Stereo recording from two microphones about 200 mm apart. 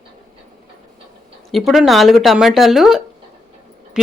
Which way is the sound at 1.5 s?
Centre (ahead or behind).